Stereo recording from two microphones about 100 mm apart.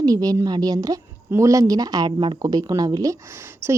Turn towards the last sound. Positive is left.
turn(degrees=-25)  # may be behind; listen again after turning